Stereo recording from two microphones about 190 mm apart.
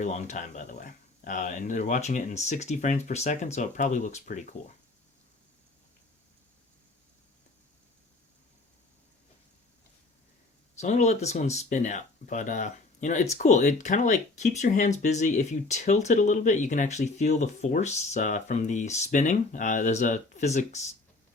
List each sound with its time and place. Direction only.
0.0 s speech: 35° left (ahead or behind)
10.8 s speech: 40° left (ahead or behind)